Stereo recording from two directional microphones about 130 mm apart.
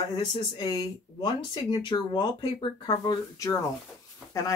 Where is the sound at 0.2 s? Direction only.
30° left (ahead or behind).